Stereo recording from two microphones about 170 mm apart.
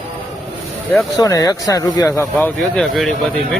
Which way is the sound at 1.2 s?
20° left (ahead or behind).